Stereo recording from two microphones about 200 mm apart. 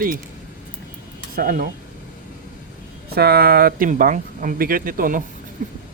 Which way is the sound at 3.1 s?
50° right (ahead or behind).